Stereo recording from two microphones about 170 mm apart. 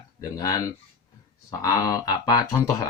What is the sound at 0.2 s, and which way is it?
Speech, 20° left (ahead or behind).